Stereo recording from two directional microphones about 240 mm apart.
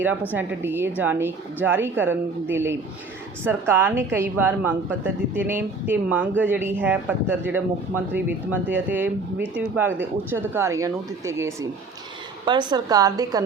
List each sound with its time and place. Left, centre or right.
0.3 s a woman's voice: centre
3.4 s a woman's voice: centre